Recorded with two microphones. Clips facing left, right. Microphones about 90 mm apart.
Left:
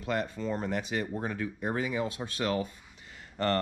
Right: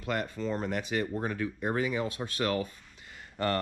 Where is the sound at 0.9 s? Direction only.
55° right (ahead or behind).